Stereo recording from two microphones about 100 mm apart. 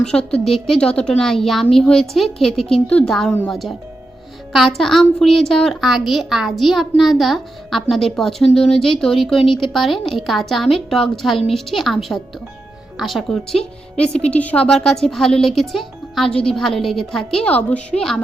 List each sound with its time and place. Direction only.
0.0 s a woman's voice: 10° left (ahead or behind)
9.4 s speech: 55° left (ahead or behind)
9.7 s a woman's voice: centre (ahead or behind)